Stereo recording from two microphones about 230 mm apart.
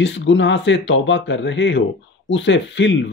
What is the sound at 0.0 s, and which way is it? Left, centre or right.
Speech, left.